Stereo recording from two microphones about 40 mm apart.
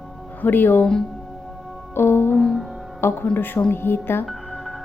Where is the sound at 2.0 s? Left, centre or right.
Left.